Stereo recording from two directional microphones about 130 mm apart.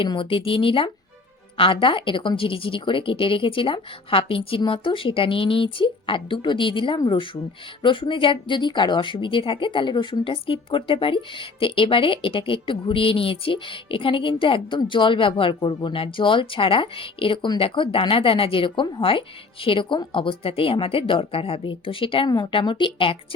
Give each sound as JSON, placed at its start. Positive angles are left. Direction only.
{"t": 0.0, "sound": "speech", "side_deg": 40}